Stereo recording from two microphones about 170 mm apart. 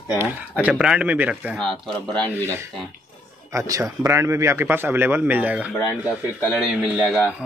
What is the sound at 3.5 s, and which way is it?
A man's voice, 20° right (ahead or behind).